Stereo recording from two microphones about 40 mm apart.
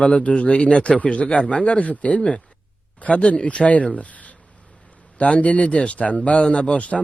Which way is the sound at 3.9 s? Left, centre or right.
Left.